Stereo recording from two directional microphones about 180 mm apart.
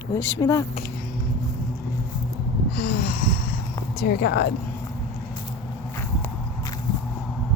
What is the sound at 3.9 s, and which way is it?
Speech, 65° left (ahead or behind).